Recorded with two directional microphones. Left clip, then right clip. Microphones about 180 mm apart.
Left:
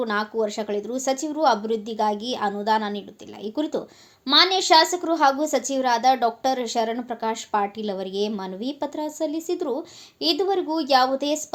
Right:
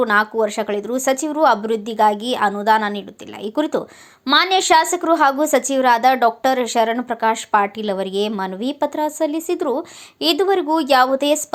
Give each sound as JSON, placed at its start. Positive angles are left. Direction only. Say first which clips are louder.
{"t": 0.0, "sound": "a woman's voice", "louder": "right 8 dB", "side_deg": -20}